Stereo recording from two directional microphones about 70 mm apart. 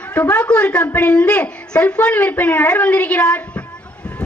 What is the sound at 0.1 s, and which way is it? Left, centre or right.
A woman's voice, centre.